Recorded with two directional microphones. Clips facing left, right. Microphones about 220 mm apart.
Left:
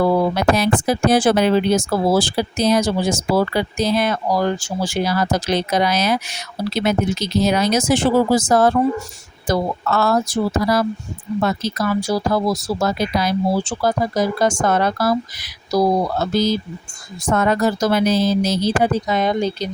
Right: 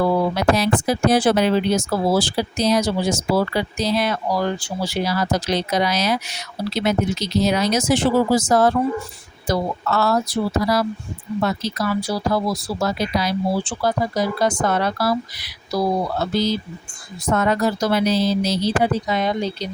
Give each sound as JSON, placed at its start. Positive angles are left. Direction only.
{"t": 0.3, "sound": "speech", "side_deg": 50}